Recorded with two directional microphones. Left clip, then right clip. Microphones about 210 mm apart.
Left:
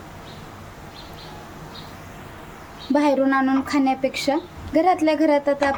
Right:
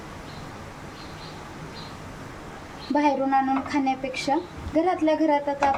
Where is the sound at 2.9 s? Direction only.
35° left (ahead or behind).